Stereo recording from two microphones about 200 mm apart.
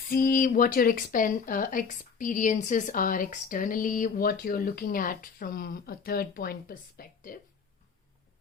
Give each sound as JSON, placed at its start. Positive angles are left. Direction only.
{"t": 0.1, "sound": "speech", "side_deg": 45}